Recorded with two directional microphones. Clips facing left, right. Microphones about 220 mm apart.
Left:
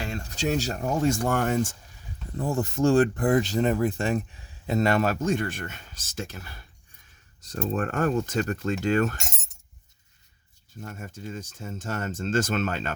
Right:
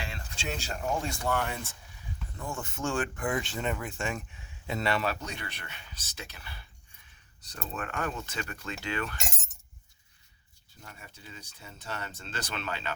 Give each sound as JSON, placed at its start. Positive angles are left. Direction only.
{"t": 0.0, "sound": "speech", "side_deg": 40}
{"t": 10.8, "sound": "speech", "side_deg": 45}